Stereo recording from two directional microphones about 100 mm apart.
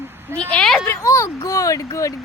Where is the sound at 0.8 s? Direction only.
30° left (ahead or behind).